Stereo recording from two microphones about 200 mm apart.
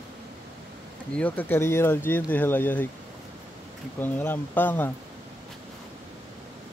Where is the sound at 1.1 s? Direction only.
10° left (ahead or behind).